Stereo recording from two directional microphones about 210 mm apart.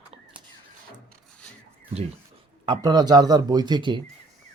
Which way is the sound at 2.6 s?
20° right (ahead or behind).